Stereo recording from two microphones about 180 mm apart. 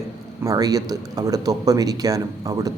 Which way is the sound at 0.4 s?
20° right (ahead or behind).